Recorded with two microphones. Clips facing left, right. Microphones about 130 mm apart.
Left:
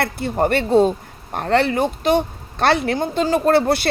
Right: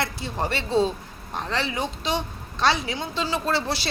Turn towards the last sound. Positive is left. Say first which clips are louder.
# left 10 dB
turn(degrees=55)  # may be behind; listen again after turning